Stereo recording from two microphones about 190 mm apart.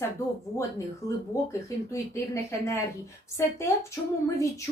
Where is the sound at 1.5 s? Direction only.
15° left (ahead or behind).